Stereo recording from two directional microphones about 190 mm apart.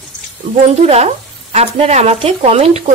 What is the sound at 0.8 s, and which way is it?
Speech, 35° right (ahead or behind).